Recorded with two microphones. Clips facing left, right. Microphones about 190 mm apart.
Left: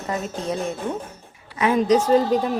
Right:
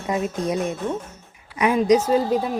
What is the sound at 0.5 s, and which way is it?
Speech, 30° left (ahead or behind).